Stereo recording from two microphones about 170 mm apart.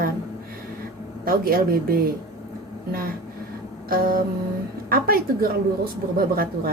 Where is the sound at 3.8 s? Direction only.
60° right (ahead or behind).